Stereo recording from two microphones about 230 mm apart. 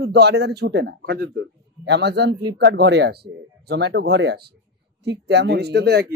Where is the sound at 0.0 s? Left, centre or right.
Right.